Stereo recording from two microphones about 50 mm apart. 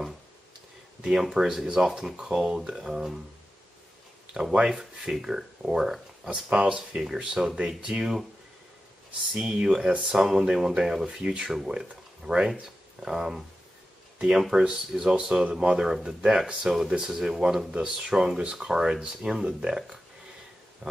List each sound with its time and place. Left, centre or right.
1.1 s speech: centre
4.3 s speech: centre
6.6 s speech: right
7.0 s speech: centre
9.3 s speech: centre
20.8 s speech: centre